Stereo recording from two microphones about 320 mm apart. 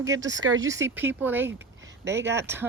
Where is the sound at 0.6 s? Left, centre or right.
Centre.